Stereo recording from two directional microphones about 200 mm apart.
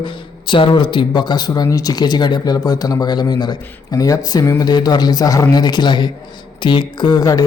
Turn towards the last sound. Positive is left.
turn(degrees=20)  # may be behind; listen again after turning